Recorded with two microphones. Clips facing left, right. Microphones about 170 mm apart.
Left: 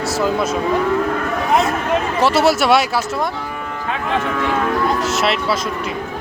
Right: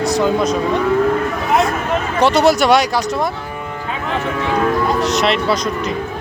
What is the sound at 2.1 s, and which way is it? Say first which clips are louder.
Speech: right 3 dB; 5° left (ahead or behind).